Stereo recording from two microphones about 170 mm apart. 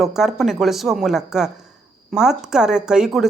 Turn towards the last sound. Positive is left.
turn(degrees=-5)  # may be behind; listen again after turning